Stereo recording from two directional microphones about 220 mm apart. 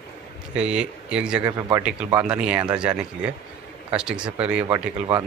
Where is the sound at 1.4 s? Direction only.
15° right (ahead or behind).